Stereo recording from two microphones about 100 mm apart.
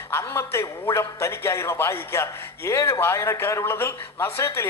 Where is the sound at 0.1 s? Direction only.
25° left (ahead or behind).